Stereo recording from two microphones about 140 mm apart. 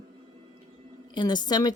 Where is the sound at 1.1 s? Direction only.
30° left (ahead or behind).